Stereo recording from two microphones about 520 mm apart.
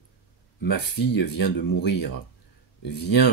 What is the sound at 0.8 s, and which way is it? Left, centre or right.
Speech, left.